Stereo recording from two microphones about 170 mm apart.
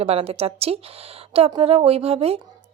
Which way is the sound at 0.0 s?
35° right (ahead or behind).